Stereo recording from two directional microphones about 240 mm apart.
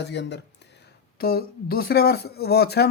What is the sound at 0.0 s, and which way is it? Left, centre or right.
Speech, left.